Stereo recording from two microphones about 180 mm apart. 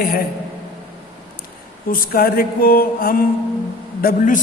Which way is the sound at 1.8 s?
55° left (ahead or behind).